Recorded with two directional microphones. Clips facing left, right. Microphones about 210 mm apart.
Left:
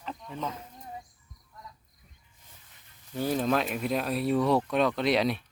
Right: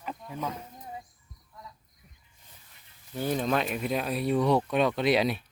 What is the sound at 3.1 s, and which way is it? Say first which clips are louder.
Speech: left 1 dB; centre (ahead or behind).